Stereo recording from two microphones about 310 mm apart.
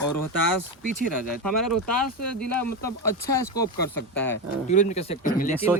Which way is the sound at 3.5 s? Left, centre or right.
Centre.